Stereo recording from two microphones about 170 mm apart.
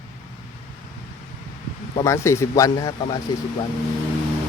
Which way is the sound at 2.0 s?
15° left (ahead or behind).